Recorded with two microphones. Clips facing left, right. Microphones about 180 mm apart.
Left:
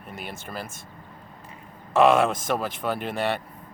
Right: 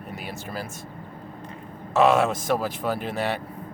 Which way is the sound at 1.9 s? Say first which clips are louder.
Left 1 dB; centre (ahead or behind).